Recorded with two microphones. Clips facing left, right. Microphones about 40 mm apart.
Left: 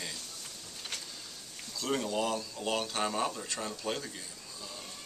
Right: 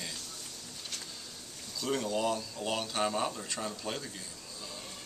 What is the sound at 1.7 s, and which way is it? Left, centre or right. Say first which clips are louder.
Speech: even; centre.